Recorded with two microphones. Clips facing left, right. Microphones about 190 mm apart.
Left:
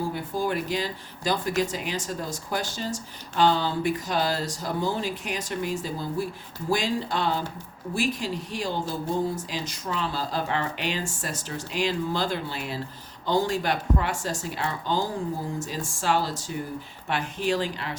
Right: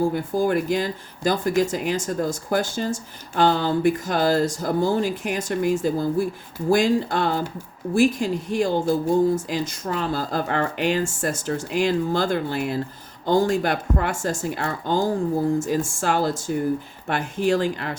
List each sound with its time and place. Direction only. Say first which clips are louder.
0.1 s speech: right 6 dB; 50° right (ahead or behind)